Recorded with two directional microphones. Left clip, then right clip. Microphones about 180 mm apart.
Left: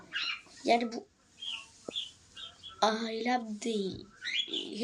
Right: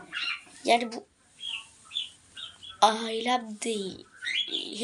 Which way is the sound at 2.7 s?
10° left (ahead or behind).